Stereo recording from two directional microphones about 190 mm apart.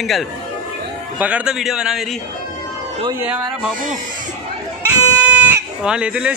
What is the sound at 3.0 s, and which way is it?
Speech, 15° right (ahead or behind).